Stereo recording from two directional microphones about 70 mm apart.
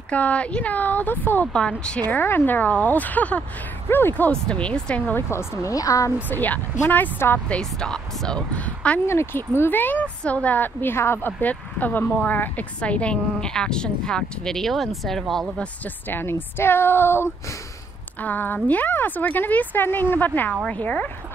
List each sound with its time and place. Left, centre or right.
0.1 s a woman's voice: centre
1.5 s a woman's voice: centre
2.0 s a woman's voice: left
4.3 s a woman's voice: centre
5.1 s speech: left
6.3 s a woman's voice: left
7.4 s a woman's voice: centre
9.0 s speech: left
9.6 s a woman's voice: left; by 15.4 s centre
16.1 s a woman's voice: left